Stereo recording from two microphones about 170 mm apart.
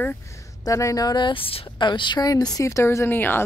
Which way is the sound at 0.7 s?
20° left (ahead or behind).